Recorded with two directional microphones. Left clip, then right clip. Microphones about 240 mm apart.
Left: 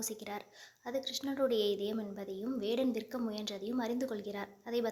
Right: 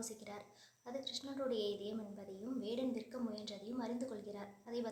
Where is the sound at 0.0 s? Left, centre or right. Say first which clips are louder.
Left 7 dB; left.